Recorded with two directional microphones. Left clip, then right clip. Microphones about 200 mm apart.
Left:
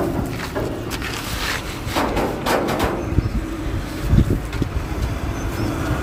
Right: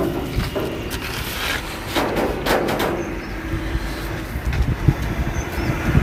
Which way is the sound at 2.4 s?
35° right (ahead or behind).